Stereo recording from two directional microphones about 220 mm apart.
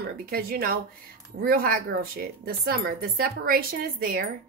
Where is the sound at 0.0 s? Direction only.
45° right (ahead or behind).